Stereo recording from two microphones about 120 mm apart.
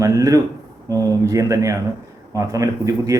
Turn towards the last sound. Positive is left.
turn(degrees=-25)  # may be behind; listen again after turning